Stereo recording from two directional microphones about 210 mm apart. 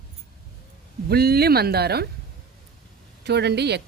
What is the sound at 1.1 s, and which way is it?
Speech, 50° right (ahead or behind).